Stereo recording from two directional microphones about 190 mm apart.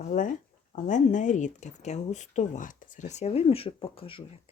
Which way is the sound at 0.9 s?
40° left (ahead or behind).